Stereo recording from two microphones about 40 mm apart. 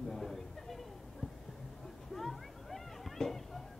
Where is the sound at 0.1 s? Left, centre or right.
Centre.